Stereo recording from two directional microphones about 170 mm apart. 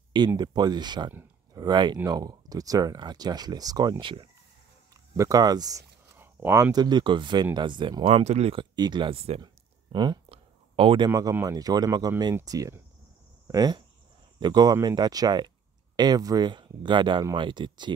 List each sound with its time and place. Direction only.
0.4 s speech: 25° right (ahead or behind)
8.0 s speech: 40° right (ahead or behind)
9.9 s a sound: 30° right (ahead or behind)
11.1 s speech: 15° right (ahead or behind)